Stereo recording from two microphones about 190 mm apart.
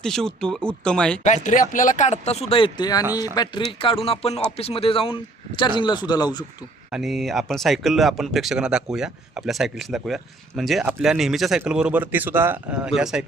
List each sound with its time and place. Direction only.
0.0 s speech: 5° left (ahead or behind)
1.2 s a man's voice: 40° left (ahead or behind); by 6.4 s 20° left (ahead or behind)
6.9 s speech: centre (ahead or behind)